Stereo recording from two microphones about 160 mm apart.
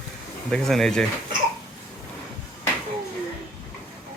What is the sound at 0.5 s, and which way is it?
Speech, 5° left (ahead or behind).